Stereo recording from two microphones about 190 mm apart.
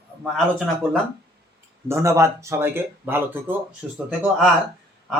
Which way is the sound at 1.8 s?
15° right (ahead or behind).